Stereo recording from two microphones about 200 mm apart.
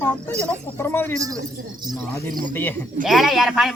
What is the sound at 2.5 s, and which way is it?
Speech, 10° left (ahead or behind).